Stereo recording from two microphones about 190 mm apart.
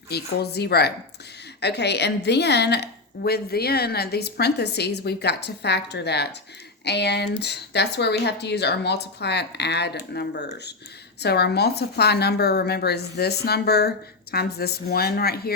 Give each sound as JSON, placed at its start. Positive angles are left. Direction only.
{"t": 0.1, "sound": "a woman's voice", "side_deg": 60}